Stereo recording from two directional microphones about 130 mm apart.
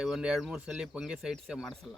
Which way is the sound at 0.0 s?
5° right (ahead or behind).